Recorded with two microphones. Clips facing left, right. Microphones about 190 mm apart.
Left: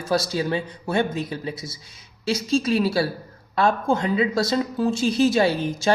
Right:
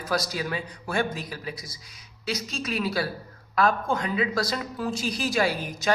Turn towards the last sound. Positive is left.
turn(degrees=25)  # may be behind; listen again after turning